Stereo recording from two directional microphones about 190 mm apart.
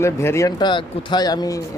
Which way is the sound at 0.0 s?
15° left (ahead or behind).